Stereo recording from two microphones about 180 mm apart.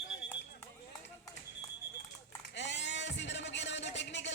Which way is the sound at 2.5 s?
75° left (ahead or behind).